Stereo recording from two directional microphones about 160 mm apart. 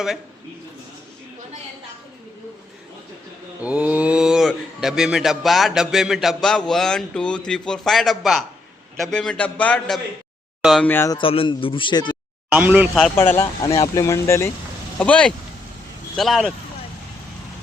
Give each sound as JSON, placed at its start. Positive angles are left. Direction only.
{"t": 3.6, "sound": "speech", "side_deg": -10}
{"t": 11.1, "sound": "a man's voice", "side_deg": 35}
{"t": 12.5, "sound": "speech", "side_deg": -10}
{"t": 13.1, "sound": "speech", "side_deg": 15}